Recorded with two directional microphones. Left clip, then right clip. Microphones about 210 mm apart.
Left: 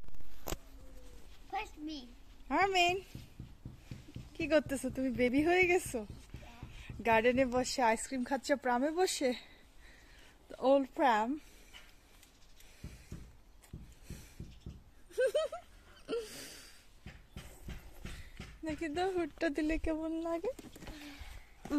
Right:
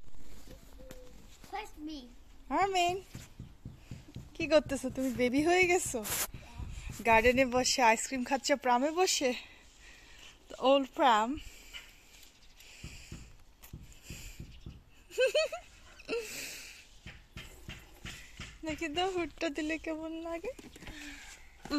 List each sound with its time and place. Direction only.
1.5 s a child's voice: 15° right (ahead or behind)
2.4 s speech: 5° left (ahead or behind)
4.3 s speech: centre (ahead or behind)
10.5 s speech: 5° left (ahead or behind)
12.8 s a sound: centre (ahead or behind)
15.0 s speech: centre (ahead or behind)
16.1 s gasp: centre (ahead or behind)
18.6 s speech: centre (ahead or behind); by 20.5 s 30° left (ahead or behind)
20.8 s a sound: 15° left (ahead or behind)